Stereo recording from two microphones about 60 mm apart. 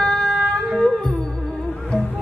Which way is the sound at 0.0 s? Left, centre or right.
Centre.